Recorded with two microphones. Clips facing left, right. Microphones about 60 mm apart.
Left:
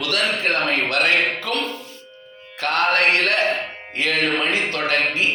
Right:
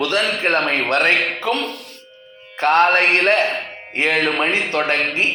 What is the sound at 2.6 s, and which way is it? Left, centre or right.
A man's voice, right.